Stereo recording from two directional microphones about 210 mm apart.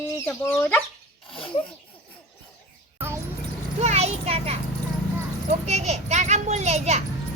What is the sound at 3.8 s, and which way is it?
Children playing, 30° right (ahead or behind).